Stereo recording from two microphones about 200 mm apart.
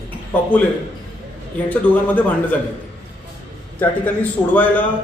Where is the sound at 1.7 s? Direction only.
10° left (ahead or behind).